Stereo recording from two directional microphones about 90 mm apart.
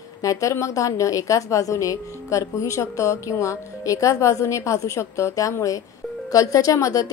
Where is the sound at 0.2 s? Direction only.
40° left (ahead or behind).